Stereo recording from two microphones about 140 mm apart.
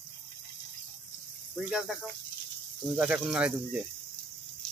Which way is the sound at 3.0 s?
10° right (ahead or behind).